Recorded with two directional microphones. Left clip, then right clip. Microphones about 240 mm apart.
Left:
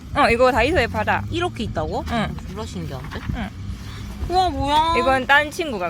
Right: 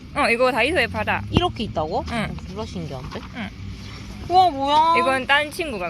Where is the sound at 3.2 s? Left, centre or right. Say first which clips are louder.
Left 2 dB; centre.